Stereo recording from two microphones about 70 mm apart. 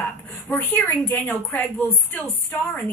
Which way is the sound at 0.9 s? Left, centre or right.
Left.